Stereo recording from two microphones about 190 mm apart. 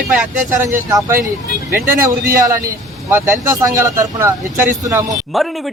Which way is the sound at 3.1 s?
15° right (ahead or behind).